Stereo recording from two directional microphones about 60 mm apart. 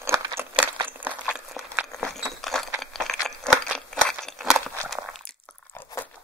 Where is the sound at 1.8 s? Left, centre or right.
Right.